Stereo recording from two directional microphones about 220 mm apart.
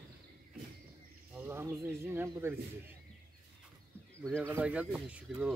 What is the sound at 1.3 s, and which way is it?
A man's voice, 10° right (ahead or behind).